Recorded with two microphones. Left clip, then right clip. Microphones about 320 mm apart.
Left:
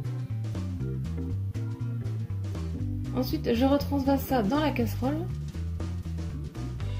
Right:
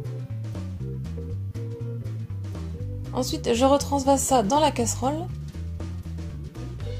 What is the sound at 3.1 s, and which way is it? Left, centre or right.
Speech, right.